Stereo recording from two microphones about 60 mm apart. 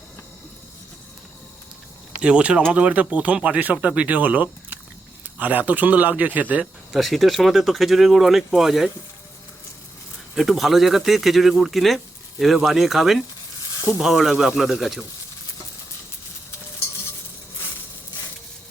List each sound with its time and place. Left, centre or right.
2.2 s speech: centre
6.9 s speech: centre
10.3 s speech: centre